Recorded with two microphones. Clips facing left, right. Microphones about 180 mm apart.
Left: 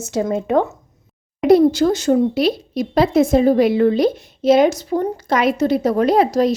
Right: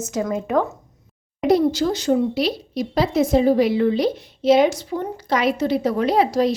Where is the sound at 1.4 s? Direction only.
55° left (ahead or behind).